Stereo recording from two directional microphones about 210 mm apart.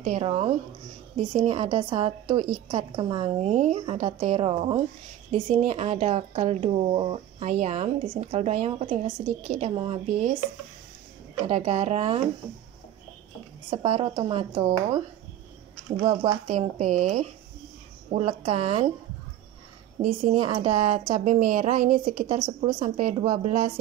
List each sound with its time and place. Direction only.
0.0 s a woman's voice: 30° right (ahead or behind)
11.4 s speech: 35° right (ahead or behind)
13.7 s a woman's voice: 25° right (ahead or behind)
16.0 s speech: 25° right (ahead or behind)
20.0 s speech: 35° right (ahead or behind)